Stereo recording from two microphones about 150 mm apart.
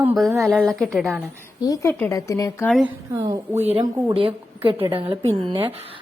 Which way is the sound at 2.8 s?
25° right (ahead or behind).